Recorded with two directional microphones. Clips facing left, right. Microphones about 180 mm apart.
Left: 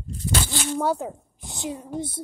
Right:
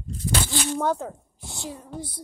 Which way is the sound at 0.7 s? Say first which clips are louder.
Left 3 dB; 10° left (ahead or behind).